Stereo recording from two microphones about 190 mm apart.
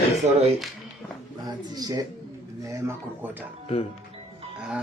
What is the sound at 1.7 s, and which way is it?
Speech, 20° right (ahead or behind).